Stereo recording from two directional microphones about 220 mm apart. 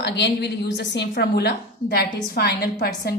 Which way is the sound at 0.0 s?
50° left (ahead or behind).